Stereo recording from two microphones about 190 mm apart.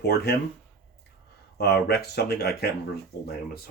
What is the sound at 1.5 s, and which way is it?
Speech, 55° left (ahead or behind).